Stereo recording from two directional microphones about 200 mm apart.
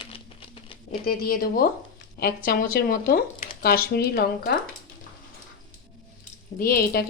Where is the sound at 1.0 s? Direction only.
45° left (ahead or behind).